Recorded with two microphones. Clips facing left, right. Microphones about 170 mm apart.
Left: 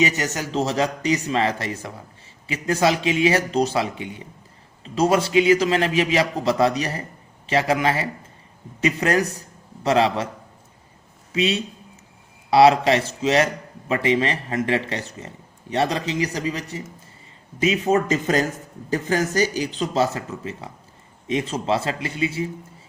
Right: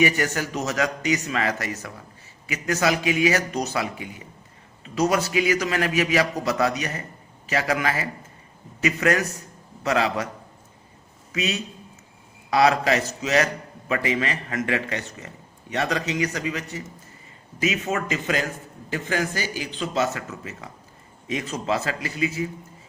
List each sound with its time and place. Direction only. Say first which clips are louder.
0.0 s a man's voice: even; 20° left (ahead or behind)
11.3 s a man's voice: left 5 dB; 30° left (ahead or behind)